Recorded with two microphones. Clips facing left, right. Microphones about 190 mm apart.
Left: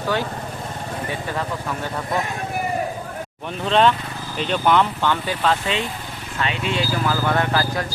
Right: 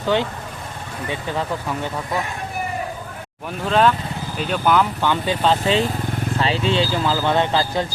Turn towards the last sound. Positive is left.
turn(degrees=-25)  # may be behind; listen again after turning